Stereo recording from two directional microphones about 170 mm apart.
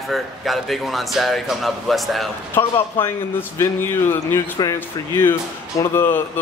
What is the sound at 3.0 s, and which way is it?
A man's voice, 15° left (ahead or behind).